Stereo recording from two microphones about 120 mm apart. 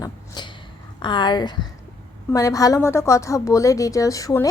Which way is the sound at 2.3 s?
25° left (ahead or behind).